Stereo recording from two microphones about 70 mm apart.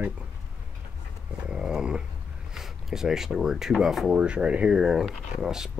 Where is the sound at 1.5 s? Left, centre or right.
Centre.